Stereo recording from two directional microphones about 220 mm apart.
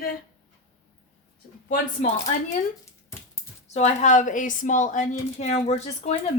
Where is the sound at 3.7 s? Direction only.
30° left (ahead or behind).